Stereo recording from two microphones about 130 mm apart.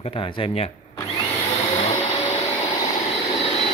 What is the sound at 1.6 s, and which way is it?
Vacuum cleaner, 60° left (ahead or behind).